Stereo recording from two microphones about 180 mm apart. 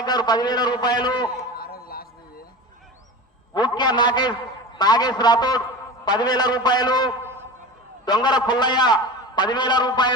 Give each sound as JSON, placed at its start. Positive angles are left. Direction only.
{"t": 0.0, "sound": "a man's voice", "side_deg": 25}
{"t": 1.5, "sound": "a sound", "side_deg": 55}
{"t": 3.5, "sound": "a man's voice", "side_deg": 25}